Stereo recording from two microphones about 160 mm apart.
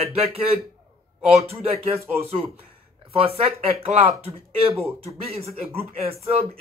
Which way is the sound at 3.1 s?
35° right (ahead or behind).